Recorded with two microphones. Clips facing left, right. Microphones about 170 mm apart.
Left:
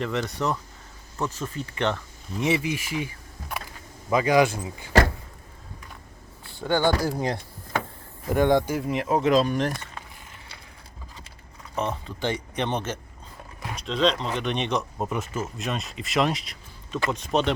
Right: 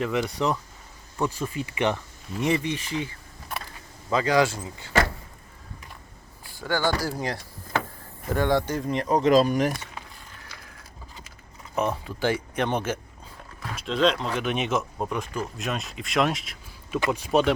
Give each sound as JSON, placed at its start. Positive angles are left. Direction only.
{"t": 0.0, "sound": "speech", "side_deg": -10}
{"t": 2.4, "sound": "speech", "side_deg": 5}
{"t": 6.5, "sound": "speech", "side_deg": 20}
{"t": 9.4, "sound": "speech", "side_deg": -5}
{"t": 11.7, "sound": "speech", "side_deg": -10}